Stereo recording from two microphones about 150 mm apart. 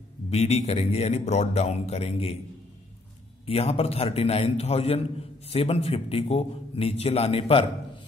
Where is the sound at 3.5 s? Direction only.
45° left (ahead or behind).